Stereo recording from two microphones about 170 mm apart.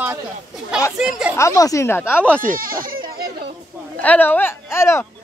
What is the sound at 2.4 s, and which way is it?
Speech, 55° right (ahead or behind).